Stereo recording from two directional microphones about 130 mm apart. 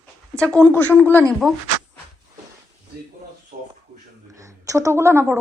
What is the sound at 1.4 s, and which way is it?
Speech, 5° left (ahead or behind).